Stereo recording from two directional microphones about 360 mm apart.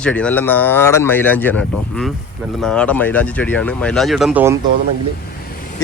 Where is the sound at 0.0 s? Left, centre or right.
Centre.